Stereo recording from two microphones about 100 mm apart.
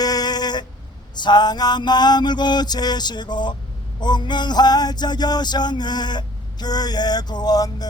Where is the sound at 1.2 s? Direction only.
45° left (ahead or behind).